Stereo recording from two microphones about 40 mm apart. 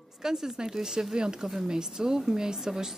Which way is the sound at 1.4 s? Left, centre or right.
Centre.